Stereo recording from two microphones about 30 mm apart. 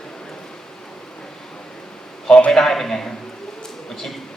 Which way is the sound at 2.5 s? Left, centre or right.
Centre.